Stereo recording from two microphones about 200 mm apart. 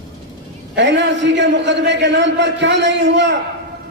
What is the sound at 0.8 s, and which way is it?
A man's voice, 60° right (ahead or behind).